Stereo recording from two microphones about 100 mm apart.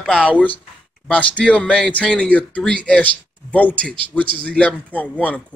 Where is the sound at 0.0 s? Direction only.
10° left (ahead or behind).